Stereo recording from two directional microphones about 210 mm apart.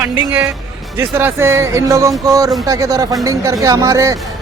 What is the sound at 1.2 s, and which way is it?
Speech, 10° right (ahead or behind).